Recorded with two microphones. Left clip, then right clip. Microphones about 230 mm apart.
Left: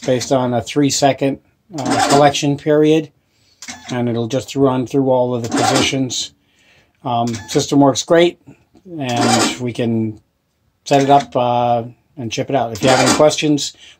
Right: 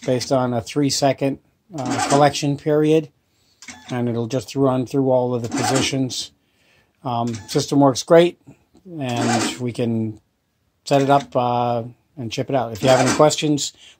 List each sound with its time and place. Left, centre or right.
0.0 s speech: right
5.9 s a sound: right
7.5 s speech: right
11.2 s speech: right